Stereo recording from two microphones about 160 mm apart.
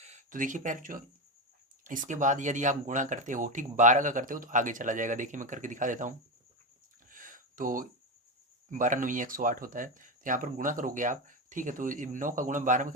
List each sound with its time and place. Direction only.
0.0 s speech: 45° right (ahead or behind)
7.1 s a sound: 55° right (ahead or behind)
8.7 s speech: 55° right (ahead or behind)